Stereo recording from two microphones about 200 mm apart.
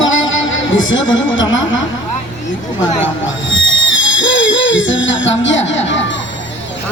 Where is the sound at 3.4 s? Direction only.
70° left (ahead or behind).